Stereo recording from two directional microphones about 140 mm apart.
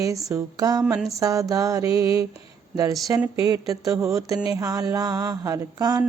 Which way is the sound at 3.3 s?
25° right (ahead or behind).